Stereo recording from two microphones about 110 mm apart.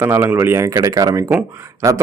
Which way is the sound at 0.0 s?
20° right (ahead or behind).